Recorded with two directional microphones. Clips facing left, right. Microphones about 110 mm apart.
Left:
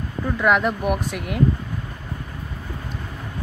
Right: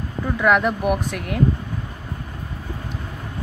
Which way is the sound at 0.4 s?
Centre (ahead or behind).